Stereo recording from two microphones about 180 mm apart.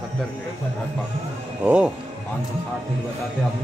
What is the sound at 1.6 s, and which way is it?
Speech, 5° right (ahead or behind).